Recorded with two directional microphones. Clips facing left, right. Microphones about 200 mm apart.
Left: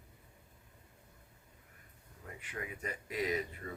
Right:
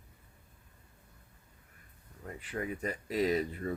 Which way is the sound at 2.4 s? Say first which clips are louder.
Right 7 dB; 35° right (ahead or behind).